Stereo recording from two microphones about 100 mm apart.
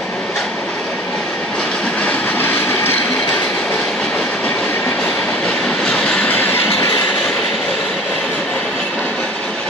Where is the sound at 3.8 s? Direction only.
5° left (ahead or behind); by 6.9 s 25° left (ahead or behind).